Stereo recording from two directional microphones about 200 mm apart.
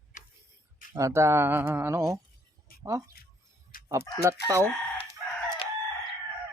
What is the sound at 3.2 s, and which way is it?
Music, 50° left (ahead or behind).